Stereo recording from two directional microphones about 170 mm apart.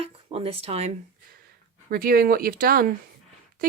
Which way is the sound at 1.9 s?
60° right (ahead or behind).